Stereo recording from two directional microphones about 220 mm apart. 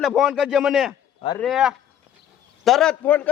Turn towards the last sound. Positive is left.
turn(degrees=5)  # may be behind; listen again after turning